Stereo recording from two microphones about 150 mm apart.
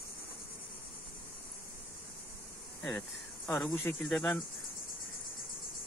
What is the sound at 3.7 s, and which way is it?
Speech, 10° left (ahead or behind).